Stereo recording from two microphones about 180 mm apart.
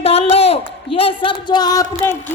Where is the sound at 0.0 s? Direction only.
35° left (ahead or behind).